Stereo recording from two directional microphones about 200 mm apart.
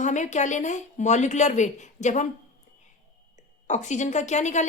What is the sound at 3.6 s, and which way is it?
Speech, 35° left (ahead or behind).